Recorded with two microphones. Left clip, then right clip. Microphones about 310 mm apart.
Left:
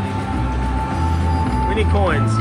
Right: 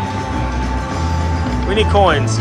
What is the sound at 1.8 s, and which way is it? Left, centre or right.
Speech, centre.